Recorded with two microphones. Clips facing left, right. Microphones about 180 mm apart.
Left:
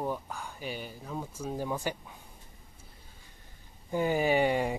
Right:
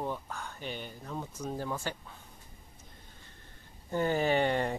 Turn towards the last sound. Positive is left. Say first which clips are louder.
# left 2 dB
turn(degrees=10)  # may be behind; listen again after turning